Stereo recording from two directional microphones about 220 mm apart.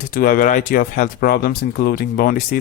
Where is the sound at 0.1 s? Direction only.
40° left (ahead or behind).